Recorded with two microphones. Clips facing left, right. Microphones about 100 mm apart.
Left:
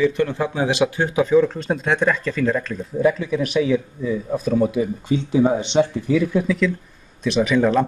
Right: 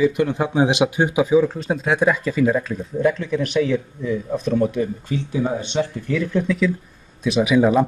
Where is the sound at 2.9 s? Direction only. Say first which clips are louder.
Left 1 dB; 5° left (ahead or behind).